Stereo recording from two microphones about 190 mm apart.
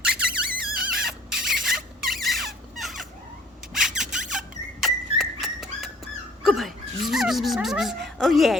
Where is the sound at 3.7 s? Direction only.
Centre (ahead or behind).